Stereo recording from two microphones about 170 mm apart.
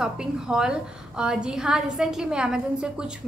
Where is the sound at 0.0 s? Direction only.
5° right (ahead or behind).